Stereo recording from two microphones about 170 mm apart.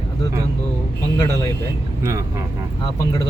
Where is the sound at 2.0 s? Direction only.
15° right (ahead or behind).